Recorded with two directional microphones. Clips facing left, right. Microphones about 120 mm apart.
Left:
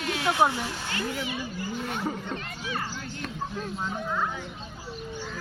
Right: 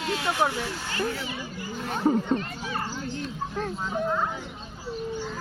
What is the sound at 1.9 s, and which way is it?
Speech, 35° right (ahead or behind).